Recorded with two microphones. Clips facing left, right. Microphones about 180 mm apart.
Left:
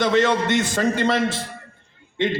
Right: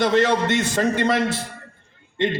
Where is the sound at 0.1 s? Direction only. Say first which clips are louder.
Even; 55° left (ahead or behind).